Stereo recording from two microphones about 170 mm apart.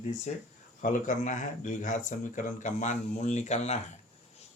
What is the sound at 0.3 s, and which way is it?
Speech, 40° left (ahead or behind).